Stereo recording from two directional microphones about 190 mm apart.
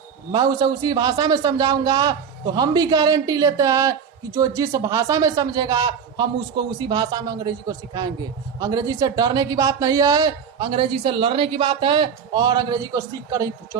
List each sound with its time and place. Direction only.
0.3 s speech: 25° right (ahead or behind)